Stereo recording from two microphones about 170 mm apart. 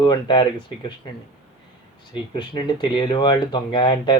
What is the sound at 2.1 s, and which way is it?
Speech, 30° left (ahead or behind).